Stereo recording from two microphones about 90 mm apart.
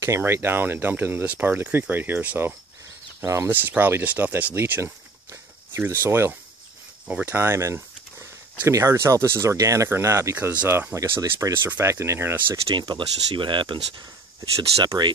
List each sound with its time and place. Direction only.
0.0 s speech: 25° right (ahead or behind)
7.1 s speech: 20° right (ahead or behind)
11.0 s speech: 40° right (ahead or behind)
11.6 s speech: 25° right (ahead or behind)
12.7 s speech: 60° right (ahead or behind)
14.9 s speech: 35° right (ahead or behind)